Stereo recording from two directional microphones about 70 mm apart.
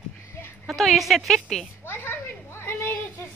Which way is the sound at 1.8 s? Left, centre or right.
Left.